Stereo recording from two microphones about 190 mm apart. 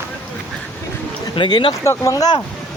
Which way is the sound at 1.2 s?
25° left (ahead or behind).